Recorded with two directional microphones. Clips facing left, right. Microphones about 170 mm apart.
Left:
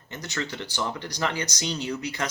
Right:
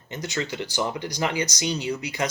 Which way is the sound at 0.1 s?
15° right (ahead or behind).